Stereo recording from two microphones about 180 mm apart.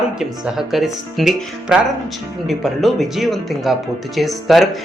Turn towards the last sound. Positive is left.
turn(degrees=0)  # may be behind; listen again after turning